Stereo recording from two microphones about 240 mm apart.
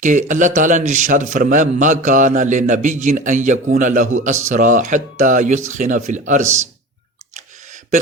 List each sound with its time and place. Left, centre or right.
0.0 s a man's voice: right
6.4 s a man's voice: right